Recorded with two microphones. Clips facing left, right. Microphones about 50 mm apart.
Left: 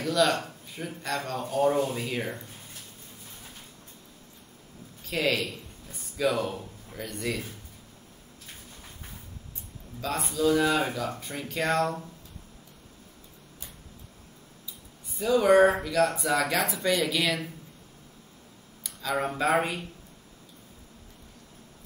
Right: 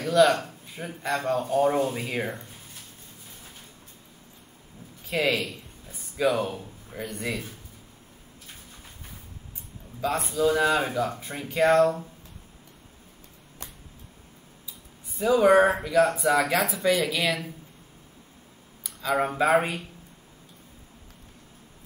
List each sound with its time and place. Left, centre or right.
0.0 s speech: centre
5.4 s a man's voice: centre
10.3 s speech: centre
15.1 s speech: centre
18.9 s speech: centre